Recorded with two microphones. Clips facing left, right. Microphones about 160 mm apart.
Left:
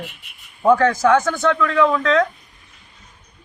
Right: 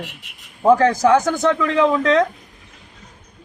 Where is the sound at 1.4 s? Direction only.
20° right (ahead or behind).